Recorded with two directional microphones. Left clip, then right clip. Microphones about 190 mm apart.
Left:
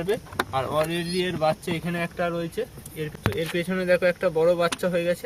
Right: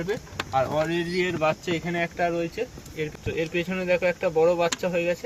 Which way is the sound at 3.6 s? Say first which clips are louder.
Left 3 dB; 25° left (ahead or behind).